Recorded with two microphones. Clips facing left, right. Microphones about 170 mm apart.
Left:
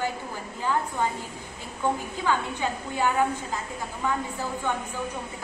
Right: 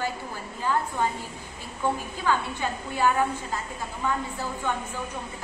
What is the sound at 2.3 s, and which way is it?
Speech, 15° left (ahead or behind).